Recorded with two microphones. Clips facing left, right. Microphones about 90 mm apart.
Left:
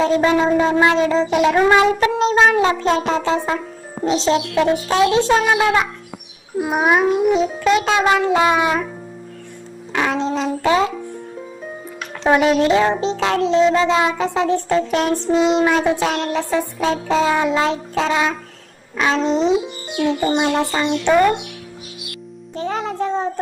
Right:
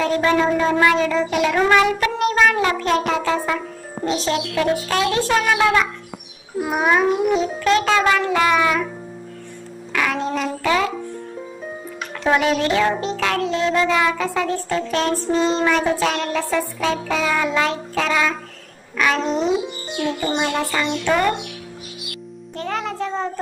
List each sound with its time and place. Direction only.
0.0 s speech: 20° left (ahead or behind)
1.7 s music: 25° left (ahead or behind)
2.8 s speech: 25° left (ahead or behind)
9.9 s music: 25° left (ahead or behind)
12.2 s speech: 25° left (ahead or behind)
22.5 s music: 20° left (ahead or behind)